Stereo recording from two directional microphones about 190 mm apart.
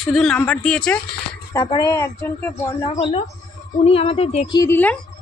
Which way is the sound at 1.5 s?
20° left (ahead or behind).